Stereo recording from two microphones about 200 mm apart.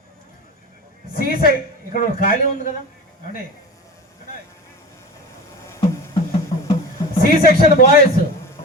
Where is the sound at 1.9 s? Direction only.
45° left (ahead or behind).